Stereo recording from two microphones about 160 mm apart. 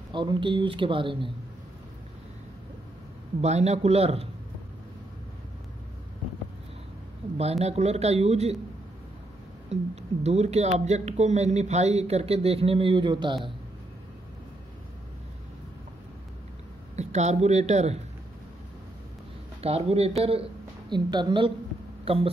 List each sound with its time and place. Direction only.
0.1 s speech: 30° right (ahead or behind)
3.3 s speech: 45° right (ahead or behind)
7.3 s speech: 40° right (ahead or behind)
9.7 s speech: 45° right (ahead or behind)
16.9 s speech: 45° right (ahead or behind)
19.6 s speech: 40° right (ahead or behind)
20.9 s a woman's voice: 30° right (ahead or behind)